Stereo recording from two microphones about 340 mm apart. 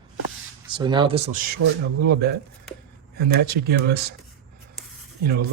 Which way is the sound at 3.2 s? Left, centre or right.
Right.